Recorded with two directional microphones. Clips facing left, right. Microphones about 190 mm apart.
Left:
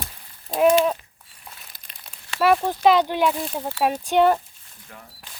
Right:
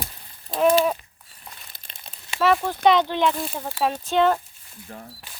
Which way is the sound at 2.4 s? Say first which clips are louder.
Left 1 dB; 10° left (ahead or behind).